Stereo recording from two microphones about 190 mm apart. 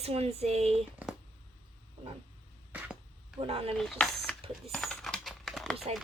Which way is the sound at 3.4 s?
30° right (ahead or behind).